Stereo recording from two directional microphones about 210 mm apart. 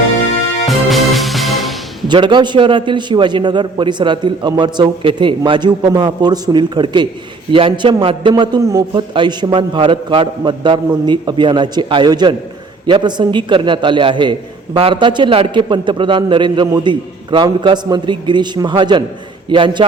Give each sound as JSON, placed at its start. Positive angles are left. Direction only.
{"t": 0.6, "sound": "music", "side_deg": 0}
{"t": 2.0, "sound": "a man's voice", "side_deg": -20}